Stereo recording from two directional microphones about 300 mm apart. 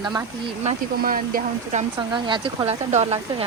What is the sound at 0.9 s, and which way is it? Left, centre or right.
Speech, right.